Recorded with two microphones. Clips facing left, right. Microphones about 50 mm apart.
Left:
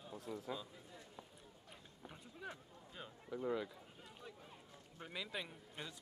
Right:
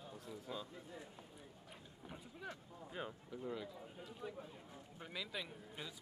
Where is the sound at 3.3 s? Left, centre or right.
Left.